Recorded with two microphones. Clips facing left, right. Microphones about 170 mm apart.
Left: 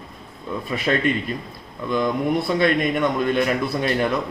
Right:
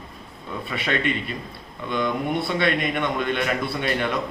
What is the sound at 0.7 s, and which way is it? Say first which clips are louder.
A man's voice: left 4 dB; 40° left (ahead or behind).